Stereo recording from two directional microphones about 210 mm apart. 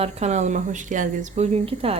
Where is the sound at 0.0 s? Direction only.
30° right (ahead or behind).